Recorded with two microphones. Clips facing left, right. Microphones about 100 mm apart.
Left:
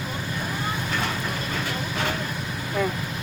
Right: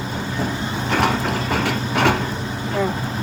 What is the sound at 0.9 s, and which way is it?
Mechanisms, 85° right.